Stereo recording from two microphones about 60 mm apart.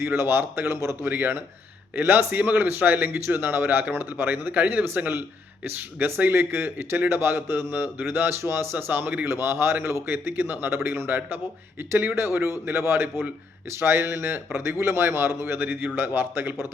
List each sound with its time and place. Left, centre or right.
0.0 s a man's voice: right
1.0 s speech: right
9.3 s a man's voice: right
15.6 s speech: right